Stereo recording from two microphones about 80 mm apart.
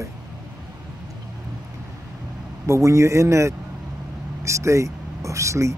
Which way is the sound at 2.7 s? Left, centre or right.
Right.